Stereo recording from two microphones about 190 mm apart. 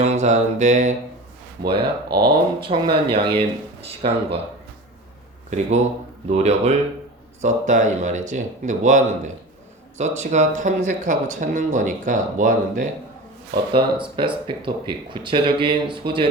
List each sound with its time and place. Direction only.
0.0 s mantra: 40° right (ahead or behind)
1.7 s speech: 55° right (ahead or behind)
2.2 s speech: 25° right (ahead or behind)
5.5 s speech: 40° right (ahead or behind)
13.7 s speech: 25° right (ahead or behind)